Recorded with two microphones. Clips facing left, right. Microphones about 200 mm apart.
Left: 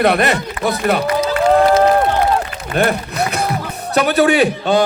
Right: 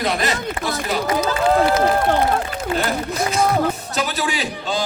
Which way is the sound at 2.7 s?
60° left (ahead or behind).